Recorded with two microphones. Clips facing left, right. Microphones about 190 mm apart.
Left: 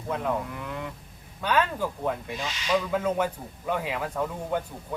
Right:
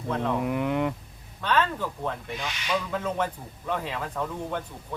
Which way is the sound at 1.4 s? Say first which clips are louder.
Even; 10° left (ahead or behind).